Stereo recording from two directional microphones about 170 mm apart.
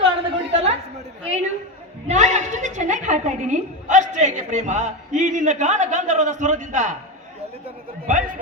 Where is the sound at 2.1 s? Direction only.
45° right (ahead or behind).